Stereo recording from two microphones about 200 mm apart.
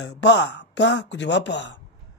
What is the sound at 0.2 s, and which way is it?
Speech, 60° left (ahead or behind).